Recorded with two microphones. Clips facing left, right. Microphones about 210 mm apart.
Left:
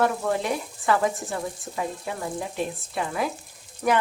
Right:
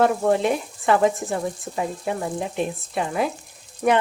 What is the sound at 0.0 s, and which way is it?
Speech, 25° right (ahead or behind).